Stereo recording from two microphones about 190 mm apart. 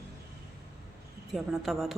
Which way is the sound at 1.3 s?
Centre (ahead or behind).